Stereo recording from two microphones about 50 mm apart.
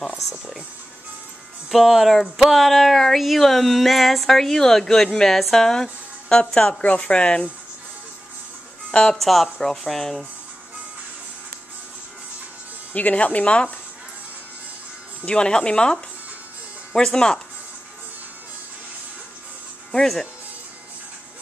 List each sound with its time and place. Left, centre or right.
0.0 s speech: centre
1.7 s speech: centre; by 7.4 s left
9.1 s speech: centre
12.9 s speech: left
15.2 s speech: centre
19.9 s speech: centre